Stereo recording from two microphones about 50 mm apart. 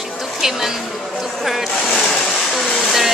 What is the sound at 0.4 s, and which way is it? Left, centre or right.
Speech, centre.